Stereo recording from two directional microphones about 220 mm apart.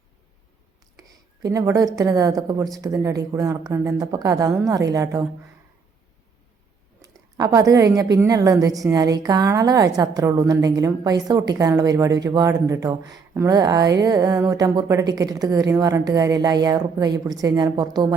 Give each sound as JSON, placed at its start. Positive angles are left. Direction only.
{"t": 0.9, "sound": "a sound", "side_deg": -15}
{"t": 2.0, "sound": "speech", "side_deg": -15}
{"t": 7.0, "sound": "a woman's voice", "side_deg": -15}